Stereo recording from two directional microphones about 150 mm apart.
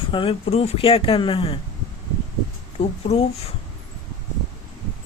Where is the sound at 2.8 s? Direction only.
40° left (ahead or behind).